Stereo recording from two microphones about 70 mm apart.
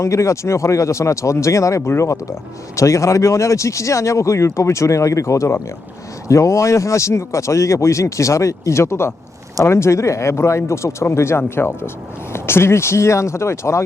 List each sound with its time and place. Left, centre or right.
0.0 s speech: left